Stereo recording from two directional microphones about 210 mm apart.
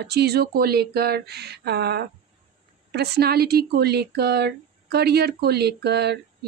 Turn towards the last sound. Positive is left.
turn(degrees=-50)  # may be behind; listen again after turning